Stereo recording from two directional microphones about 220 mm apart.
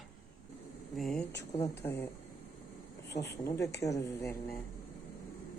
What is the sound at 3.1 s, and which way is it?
Speech, 50° left (ahead or behind).